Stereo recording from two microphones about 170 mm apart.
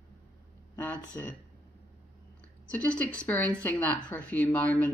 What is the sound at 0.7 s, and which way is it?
Speech, 10° left (ahead or behind).